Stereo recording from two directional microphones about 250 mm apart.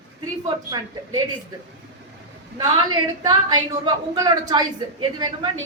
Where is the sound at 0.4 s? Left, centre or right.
Centre.